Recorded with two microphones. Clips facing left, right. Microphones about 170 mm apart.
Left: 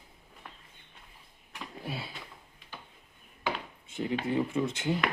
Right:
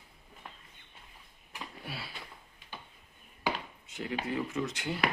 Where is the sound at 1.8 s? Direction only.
20° left (ahead or behind).